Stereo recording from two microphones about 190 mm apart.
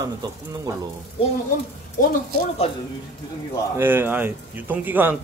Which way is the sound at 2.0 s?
50° left (ahead or behind).